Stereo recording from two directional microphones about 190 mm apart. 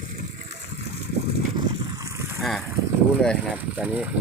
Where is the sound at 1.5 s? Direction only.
15° right (ahead or behind).